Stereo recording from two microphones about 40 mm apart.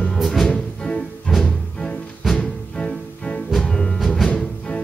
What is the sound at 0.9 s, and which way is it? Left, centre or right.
Music, left.